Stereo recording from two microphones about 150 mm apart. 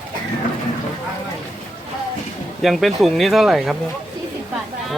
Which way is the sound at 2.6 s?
Centre (ahead or behind).